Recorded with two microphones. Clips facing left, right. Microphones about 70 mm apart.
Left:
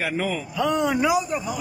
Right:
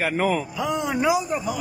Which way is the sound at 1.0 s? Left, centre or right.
Right.